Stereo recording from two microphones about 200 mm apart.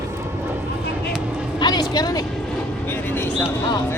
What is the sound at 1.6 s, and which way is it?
Speech, 20° left (ahead or behind).